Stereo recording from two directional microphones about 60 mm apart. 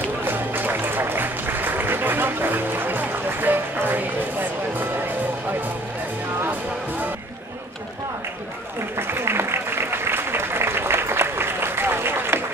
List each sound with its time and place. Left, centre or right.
0.2 s music: right
8.9 s applause: right